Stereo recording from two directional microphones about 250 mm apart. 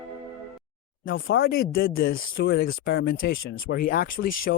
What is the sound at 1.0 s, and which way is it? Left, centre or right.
A man's voice, left.